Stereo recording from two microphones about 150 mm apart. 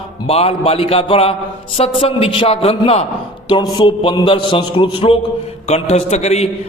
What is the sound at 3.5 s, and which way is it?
A man's voice, 30° left (ahead or behind).